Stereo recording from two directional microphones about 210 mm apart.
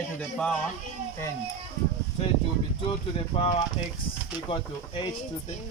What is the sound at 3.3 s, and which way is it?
Speech, 25° left (ahead or behind).